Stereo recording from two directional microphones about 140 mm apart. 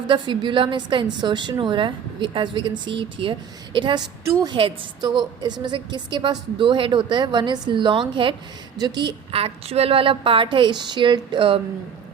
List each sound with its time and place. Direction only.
0.1 s a woman's voice: 35° right (ahead or behind)
4.2 s a woman's voice: 20° right (ahead or behind)
4.4 s a woman's voice: 35° right (ahead or behind)